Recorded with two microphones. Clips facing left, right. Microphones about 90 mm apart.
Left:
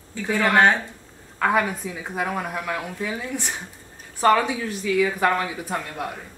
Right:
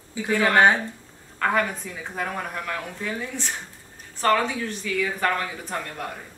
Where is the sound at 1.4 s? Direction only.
10° left (ahead or behind).